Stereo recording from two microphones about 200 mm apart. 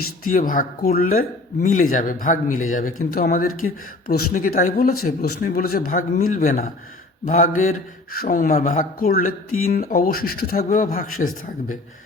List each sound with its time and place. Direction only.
0.3 s speech: 45° left (ahead or behind)
2.5 s speech: 90° left
2.7 s speech: 45° left (ahead or behind)